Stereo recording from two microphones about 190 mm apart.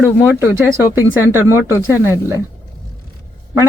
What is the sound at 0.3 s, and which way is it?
A man's voice, 10° right (ahead or behind).